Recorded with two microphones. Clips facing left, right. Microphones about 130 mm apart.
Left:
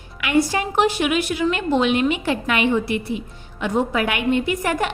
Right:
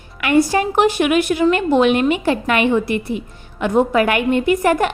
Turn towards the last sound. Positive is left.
turn(degrees=-50)  # may be behind; listen again after turning